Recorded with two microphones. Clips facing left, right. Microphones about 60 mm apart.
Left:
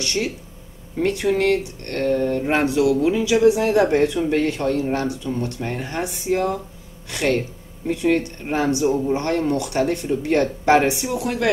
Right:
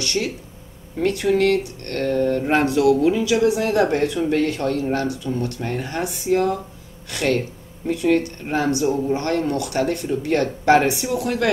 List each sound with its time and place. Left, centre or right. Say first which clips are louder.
0.0 s speech: even; left